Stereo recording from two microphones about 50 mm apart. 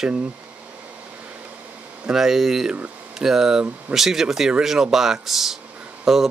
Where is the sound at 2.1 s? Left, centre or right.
Centre.